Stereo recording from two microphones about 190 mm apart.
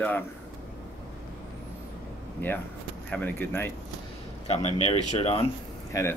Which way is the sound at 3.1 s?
10° left (ahead or behind).